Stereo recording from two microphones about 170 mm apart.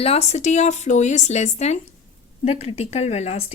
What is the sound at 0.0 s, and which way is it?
A woman's voice, 35° left (ahead or behind).